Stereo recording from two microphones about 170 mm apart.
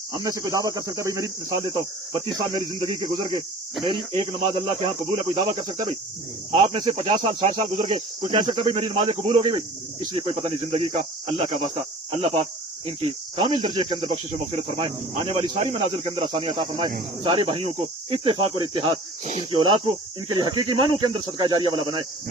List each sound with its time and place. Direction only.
0.1 s speech: 20° right (ahead or behind)
6.5 s speech: 30° right (ahead or behind)
10.2 s speech: 35° right (ahead or behind)
19.2 s speech: 45° right (ahead or behind)
19.5 s speech: 30° right (ahead or behind)